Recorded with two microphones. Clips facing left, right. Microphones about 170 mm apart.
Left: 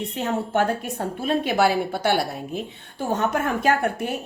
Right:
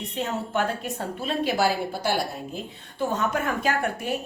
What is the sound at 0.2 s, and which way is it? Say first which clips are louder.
A woman's voice: left 3 dB; 55° left (ahead or behind).